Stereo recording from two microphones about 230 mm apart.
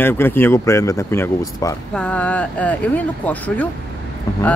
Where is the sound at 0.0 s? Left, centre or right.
Centre.